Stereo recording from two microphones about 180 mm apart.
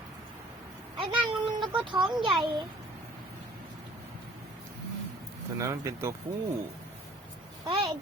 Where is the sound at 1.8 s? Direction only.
25° right (ahead or behind).